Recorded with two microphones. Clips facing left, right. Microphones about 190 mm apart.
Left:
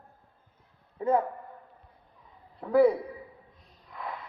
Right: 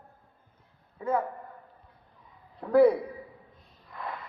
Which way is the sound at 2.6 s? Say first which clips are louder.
Right 1 dB; centre (ahead or behind).